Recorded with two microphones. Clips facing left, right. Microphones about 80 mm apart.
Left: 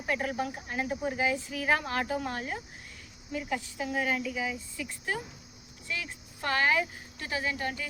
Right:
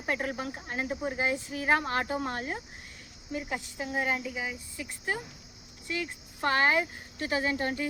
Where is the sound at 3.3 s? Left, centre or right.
Right.